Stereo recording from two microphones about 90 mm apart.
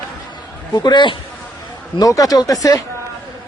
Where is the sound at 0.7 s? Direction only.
60° left (ahead or behind).